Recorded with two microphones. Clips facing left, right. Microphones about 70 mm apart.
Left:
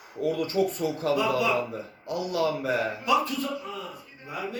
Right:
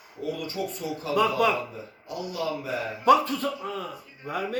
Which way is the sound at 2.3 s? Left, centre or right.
Left.